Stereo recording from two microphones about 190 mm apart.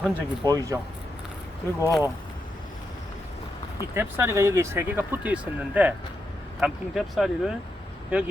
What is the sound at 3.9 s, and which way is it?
Speech, 10° right (ahead or behind).